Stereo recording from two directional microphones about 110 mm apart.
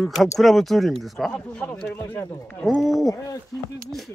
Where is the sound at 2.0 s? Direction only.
20° left (ahead or behind).